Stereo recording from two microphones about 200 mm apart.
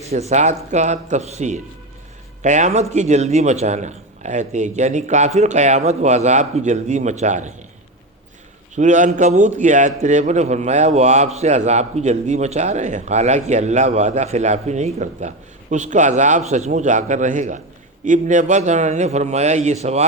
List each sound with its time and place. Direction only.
0.1 s a man's voice: 35° right (ahead or behind)
8.7 s a man's voice: 40° right (ahead or behind)